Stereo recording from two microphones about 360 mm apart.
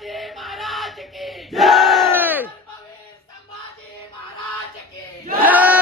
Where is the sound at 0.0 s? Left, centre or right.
Centre.